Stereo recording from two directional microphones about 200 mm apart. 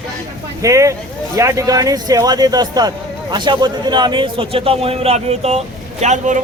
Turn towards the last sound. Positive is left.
turn(degrees=-35)  # may be behind; listen again after turning